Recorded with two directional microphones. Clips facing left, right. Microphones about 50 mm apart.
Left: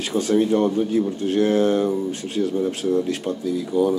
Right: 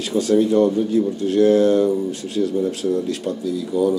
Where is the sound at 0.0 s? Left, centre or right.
Left.